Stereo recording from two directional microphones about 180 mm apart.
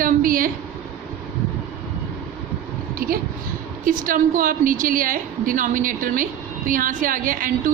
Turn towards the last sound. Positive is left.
turn(degrees=-50)  # may be behind; listen again after turning